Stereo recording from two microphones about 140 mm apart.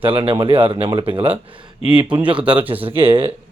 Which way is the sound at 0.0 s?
40° right (ahead or behind).